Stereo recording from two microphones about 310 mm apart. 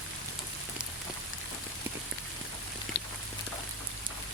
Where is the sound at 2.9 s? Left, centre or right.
Left.